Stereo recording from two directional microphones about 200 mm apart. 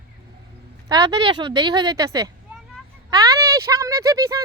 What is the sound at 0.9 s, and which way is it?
A woman's voice, 25° right (ahead or behind).